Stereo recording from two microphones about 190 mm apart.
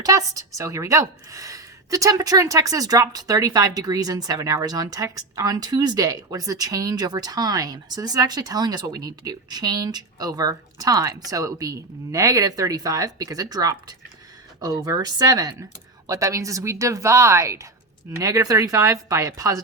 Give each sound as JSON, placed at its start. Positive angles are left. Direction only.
{"t": 0.0, "sound": "a woman's voice", "side_deg": -20}